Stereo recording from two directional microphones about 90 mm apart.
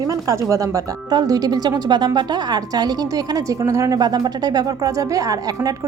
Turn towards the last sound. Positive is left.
turn(degrees=-40)  # may be behind; listen again after turning